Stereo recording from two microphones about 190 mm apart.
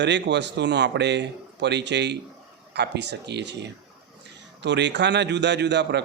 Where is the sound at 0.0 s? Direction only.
65° right (ahead or behind).